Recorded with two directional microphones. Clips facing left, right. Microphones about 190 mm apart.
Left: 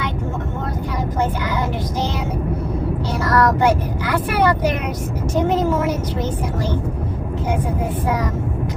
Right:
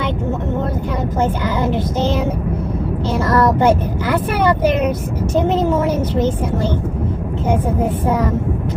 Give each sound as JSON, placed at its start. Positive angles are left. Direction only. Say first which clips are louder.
{"t": 3.2, "sound": "speech", "louder": "right 2 dB", "side_deg": -25}